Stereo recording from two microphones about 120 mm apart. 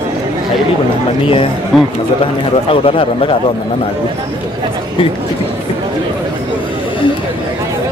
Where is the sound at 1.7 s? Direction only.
Centre (ahead or behind).